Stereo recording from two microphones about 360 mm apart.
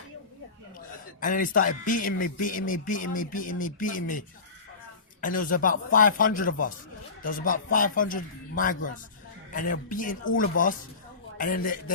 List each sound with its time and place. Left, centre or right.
1.2 s a man's voice: left
5.5 s a man's voice: left